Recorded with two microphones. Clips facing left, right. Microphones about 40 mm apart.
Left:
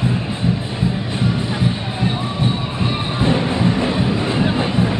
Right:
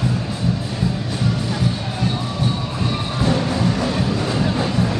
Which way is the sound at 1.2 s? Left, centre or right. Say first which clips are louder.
Left 2 dB; left.